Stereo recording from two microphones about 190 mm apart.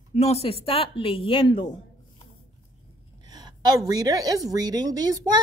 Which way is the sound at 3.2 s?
20° right (ahead or behind).